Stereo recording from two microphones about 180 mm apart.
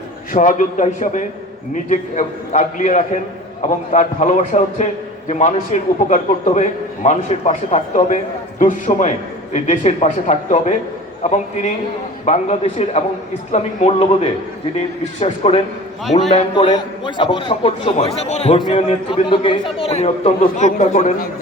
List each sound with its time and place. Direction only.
0.3 s a man's voice: 45° left (ahead or behind)
12.2 s a man's voice: 40° left (ahead or behind)